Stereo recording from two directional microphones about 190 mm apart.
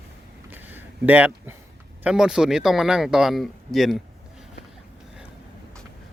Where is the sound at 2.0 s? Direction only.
5° right (ahead or behind).